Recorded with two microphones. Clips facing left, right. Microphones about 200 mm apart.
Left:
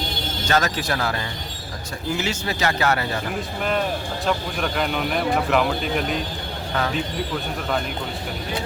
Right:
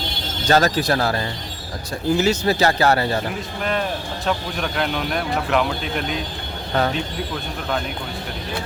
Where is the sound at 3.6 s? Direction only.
Centre (ahead or behind).